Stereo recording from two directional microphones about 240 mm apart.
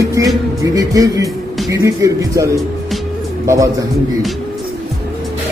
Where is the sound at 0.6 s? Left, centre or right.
Centre.